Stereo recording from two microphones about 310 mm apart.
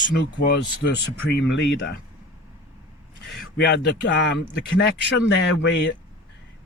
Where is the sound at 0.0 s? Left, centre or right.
Left.